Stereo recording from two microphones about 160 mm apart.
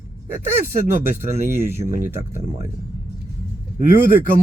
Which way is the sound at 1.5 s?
15° right (ahead or behind).